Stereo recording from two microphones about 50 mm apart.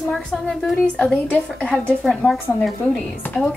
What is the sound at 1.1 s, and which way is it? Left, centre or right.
Speech, left.